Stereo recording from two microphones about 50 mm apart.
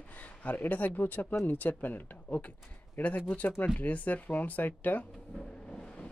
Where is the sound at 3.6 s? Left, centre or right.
Left.